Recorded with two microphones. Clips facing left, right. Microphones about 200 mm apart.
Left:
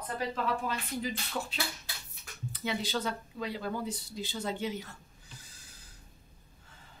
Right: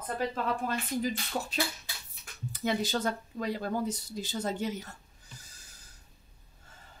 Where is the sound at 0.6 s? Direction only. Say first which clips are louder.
Right 4 dB; 45° right (ahead or behind).